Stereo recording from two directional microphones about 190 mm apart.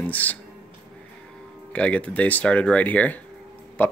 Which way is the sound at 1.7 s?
5° left (ahead or behind).